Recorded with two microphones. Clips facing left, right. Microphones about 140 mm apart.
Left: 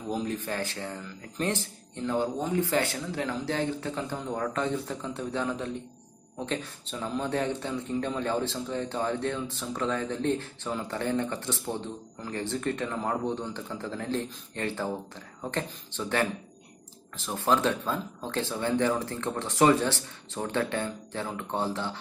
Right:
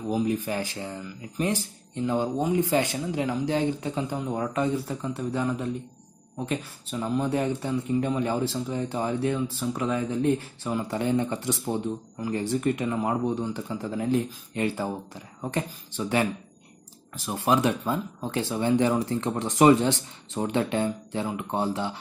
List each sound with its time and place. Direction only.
0.1 s speech: 10° right (ahead or behind)